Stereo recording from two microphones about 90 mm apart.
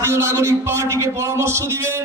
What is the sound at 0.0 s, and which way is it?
A man's voice, 30° right (ahead or behind).